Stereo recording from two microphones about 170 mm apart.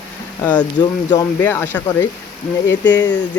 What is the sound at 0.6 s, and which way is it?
Speech, 25° left (ahead or behind).